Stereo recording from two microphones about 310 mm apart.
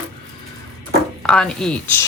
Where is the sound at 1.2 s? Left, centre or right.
Centre.